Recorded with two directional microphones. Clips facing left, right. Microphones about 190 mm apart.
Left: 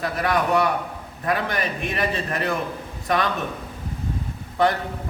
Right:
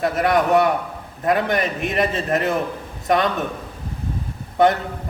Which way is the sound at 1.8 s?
20° right (ahead or behind).